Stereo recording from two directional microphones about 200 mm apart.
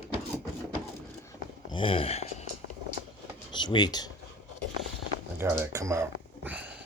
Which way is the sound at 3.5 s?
20° left (ahead or behind).